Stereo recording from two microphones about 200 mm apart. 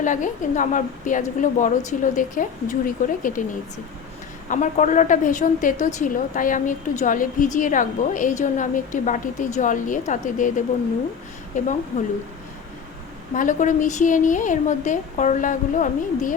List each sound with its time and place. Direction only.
0.0 s a woman's voice: 40° left (ahead or behind)
4.4 s a woman's voice: 40° left (ahead or behind)
11.6 s a woman's voice: 40° left (ahead or behind)
13.3 s a woman's voice: 40° left (ahead or behind)